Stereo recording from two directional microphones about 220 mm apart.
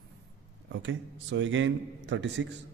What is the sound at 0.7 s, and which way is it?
A man's voice, 55° right (ahead or behind).